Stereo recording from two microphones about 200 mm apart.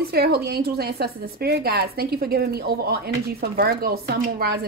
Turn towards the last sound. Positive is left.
turn(degrees=-55)  # may be behind; listen again after turning